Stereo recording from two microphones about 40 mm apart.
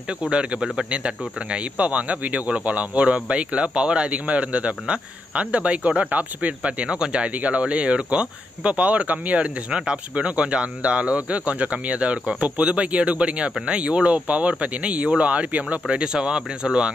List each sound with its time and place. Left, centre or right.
0.3 s speech: right
9.7 s speech: right